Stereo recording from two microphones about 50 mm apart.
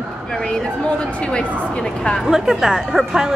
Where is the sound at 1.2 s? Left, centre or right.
Left.